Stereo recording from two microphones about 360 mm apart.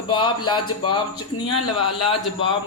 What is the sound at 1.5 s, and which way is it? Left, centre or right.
Speech, left.